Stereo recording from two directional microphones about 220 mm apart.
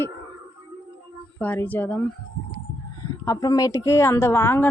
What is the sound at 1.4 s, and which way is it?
Speech, 10° left (ahead or behind).